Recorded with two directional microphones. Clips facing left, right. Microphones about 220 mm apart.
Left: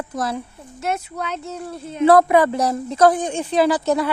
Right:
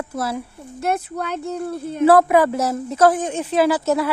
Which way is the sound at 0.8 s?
55° right (ahead or behind).